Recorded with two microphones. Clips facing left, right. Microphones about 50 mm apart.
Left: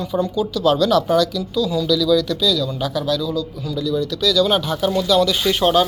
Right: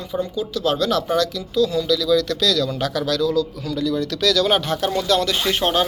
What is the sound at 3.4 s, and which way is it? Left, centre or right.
Speech, right.